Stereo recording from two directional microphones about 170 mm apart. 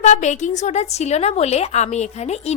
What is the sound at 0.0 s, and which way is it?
Speech, 45° left (ahead or behind).